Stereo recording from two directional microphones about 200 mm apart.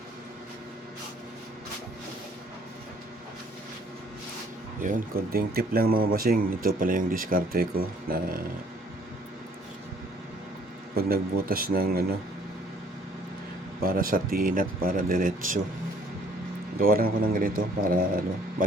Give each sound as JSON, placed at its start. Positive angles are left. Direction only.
{"t": 4.8, "sound": "speech", "side_deg": -40}
{"t": 10.9, "sound": "speech", "side_deg": -45}
{"t": 13.8, "sound": "speech", "side_deg": -45}
{"t": 16.8, "sound": "speech", "side_deg": -45}